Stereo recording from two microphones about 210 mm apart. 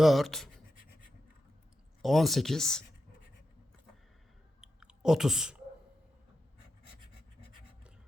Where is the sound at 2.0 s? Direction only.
Centre (ahead or behind).